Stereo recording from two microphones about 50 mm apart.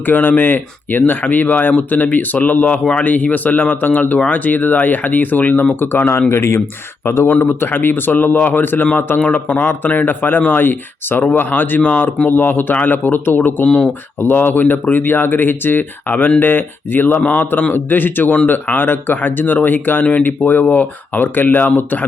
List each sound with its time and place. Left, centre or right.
0.0 s speech: left
7.6 s speech: left
12.3 s speech: left
13.7 s speech: centre
14.2 s speech: left